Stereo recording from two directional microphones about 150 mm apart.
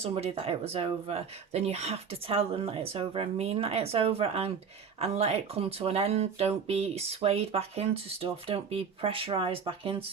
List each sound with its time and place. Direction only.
0.0 s speech: 45° right (ahead or behind)